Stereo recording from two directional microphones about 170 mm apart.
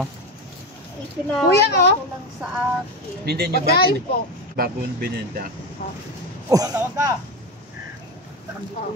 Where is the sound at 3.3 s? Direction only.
70° right (ahead or behind).